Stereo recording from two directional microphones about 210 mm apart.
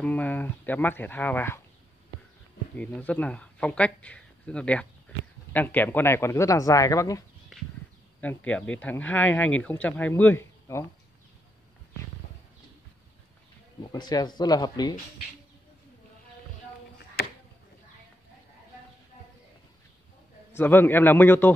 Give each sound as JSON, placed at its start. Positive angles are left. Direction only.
{"t": 0.0, "sound": "speech", "side_deg": 5}
{"t": 2.7, "sound": "speech", "side_deg": 5}
{"t": 13.9, "sound": "speech", "side_deg": 20}
{"t": 20.5, "sound": "speech", "side_deg": 10}